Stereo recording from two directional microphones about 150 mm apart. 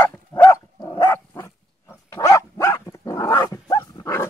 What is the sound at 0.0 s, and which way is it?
Dog, 15° left (ahead or behind).